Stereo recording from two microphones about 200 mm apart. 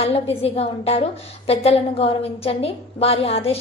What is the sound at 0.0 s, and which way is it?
A woman's voice, 30° left (ahead or behind).